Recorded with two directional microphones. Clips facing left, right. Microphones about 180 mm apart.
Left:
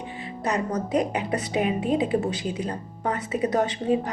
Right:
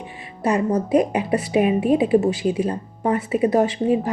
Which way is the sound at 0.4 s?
25° right (ahead or behind).